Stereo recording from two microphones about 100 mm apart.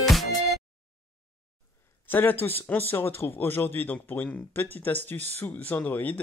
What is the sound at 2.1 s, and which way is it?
Speech, 20° left (ahead or behind).